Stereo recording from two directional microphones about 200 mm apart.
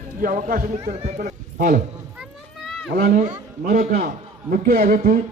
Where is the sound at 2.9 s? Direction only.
45° right (ahead or behind).